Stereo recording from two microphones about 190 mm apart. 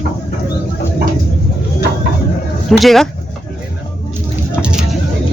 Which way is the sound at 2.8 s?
Centre (ahead or behind).